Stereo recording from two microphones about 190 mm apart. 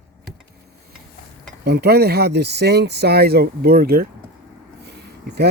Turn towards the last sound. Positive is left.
turn(degrees=-60)  # may be behind; listen again after turning